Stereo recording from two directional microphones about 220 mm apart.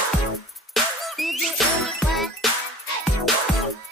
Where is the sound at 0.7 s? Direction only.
Centre (ahead or behind).